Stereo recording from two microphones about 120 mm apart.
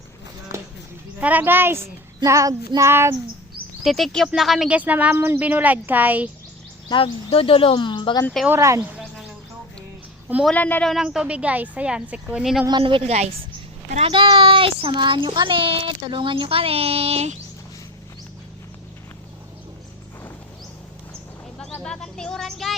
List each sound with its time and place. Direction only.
1.2 s a woman's voice: 15° right (ahead or behind)
2.2 s child singing: 25° right (ahead or behind)
3.8 s a woman's voice: centre (ahead or behind)
6.8 s speech: 45° left (ahead or behind)
8.4 s child singing: 25° right (ahead or behind)
10.5 s speech: 15° left (ahead or behind)
10.8 s a woman's voice: 5° right (ahead or behind)
12.8 s a woman's voice: 55° right (ahead or behind)
14.1 s speech: 45° right (ahead or behind); by 17.3 s 60° right (ahead or behind)
21.6 s a sound: 5° left (ahead or behind)